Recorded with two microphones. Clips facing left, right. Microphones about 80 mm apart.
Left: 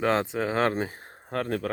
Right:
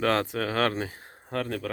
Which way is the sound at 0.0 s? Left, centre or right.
Left.